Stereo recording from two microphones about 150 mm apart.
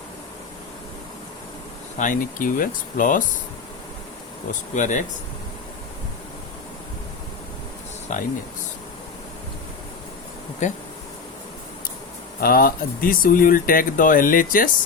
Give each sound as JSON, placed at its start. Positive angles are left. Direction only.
{"t": 2.0, "sound": "speech", "side_deg": 60}
{"t": 4.7, "sound": "speech", "side_deg": 55}
{"t": 8.1, "sound": "speech", "side_deg": 55}
{"t": 10.6, "sound": "speech", "side_deg": 50}
{"t": 12.4, "sound": "speech", "side_deg": 75}